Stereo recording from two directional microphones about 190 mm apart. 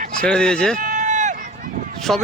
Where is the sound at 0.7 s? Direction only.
45° right (ahead or behind).